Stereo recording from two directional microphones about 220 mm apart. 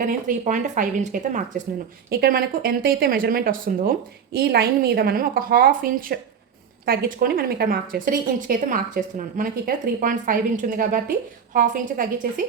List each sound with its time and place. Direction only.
0.0 s speech: 40° right (ahead or behind)